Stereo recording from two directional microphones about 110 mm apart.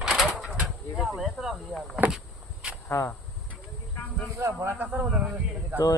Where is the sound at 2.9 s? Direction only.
25° left (ahead or behind).